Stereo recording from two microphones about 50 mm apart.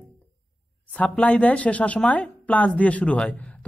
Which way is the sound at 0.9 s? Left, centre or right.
Left.